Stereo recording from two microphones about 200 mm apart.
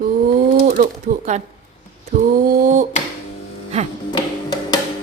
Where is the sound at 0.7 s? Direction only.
40° right (ahead or behind).